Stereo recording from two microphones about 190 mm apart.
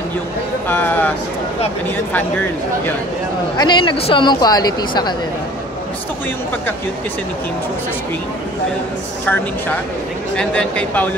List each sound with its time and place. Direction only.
0.7 s speech: 10° left (ahead or behind)
3.5 s speech: 25° left (ahead or behind)
9.2 s speech: 10° left (ahead or behind)